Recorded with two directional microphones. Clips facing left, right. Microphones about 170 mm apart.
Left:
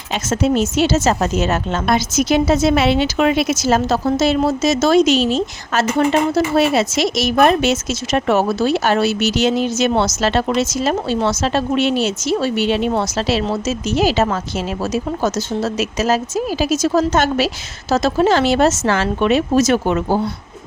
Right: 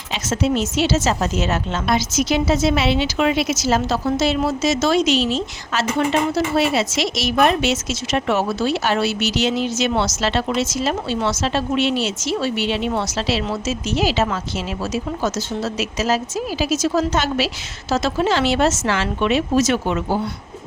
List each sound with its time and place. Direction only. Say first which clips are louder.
0.1 s a woman's voice: left 3 dB; 45° left (ahead or behind)